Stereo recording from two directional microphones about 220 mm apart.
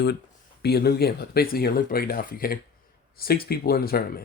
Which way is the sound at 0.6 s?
45° left (ahead or behind).